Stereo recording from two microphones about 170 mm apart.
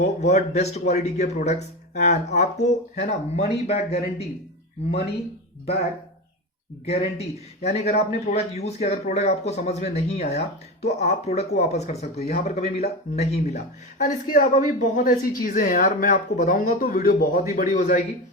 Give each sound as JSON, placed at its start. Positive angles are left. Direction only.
{"t": 0.0, "sound": "a man's voice", "side_deg": 45}
{"t": 14.0, "sound": "a woman's voice", "side_deg": 50}